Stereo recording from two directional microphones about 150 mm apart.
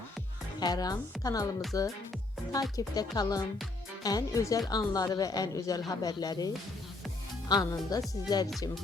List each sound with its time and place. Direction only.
0.6 s speech: 25° left (ahead or behind)